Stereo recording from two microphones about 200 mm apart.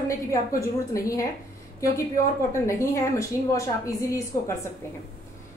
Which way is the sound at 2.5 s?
15° left (ahead or behind).